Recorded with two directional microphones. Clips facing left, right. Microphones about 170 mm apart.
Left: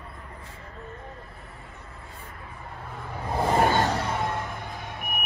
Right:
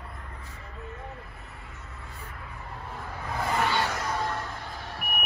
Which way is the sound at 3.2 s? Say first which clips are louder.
Left 6 dB; 30° left (ahead or behind).